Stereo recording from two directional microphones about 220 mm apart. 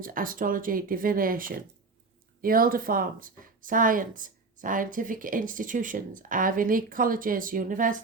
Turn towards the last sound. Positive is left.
turn(degrees=-40)  # may be behind; listen again after turning